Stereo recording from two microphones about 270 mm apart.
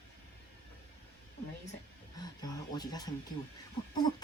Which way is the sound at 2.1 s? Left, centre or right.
Centre.